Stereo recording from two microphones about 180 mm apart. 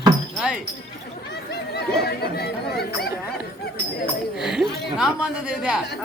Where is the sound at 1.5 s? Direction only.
65° left (ahead or behind).